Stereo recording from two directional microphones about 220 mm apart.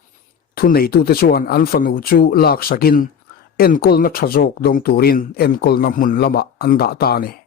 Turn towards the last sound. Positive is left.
turn(degrees=45)  # may be behind; listen again after turning